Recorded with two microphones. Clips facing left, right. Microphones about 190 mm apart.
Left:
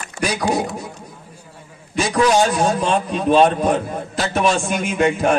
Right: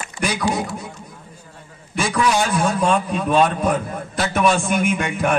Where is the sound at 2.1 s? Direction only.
35° left (ahead or behind).